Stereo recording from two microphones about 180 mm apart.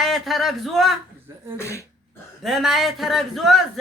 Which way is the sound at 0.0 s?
Centre (ahead or behind).